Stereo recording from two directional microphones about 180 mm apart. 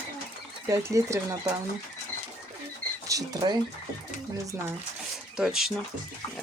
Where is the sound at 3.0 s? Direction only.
20° right (ahead or behind).